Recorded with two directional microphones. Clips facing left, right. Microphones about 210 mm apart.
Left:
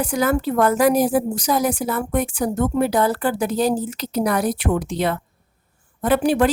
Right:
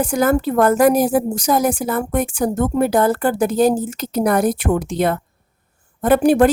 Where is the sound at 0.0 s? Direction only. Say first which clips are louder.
Right 3 dB; 50° right (ahead or behind).